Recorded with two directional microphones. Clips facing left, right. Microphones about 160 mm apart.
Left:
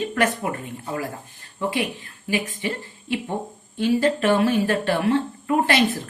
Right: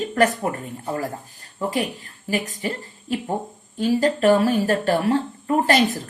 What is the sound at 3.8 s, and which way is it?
A woman's voice, 40° right (ahead or behind).